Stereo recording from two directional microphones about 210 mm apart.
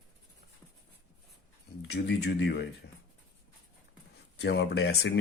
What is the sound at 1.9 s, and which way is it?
Speech, 55° left (ahead or behind).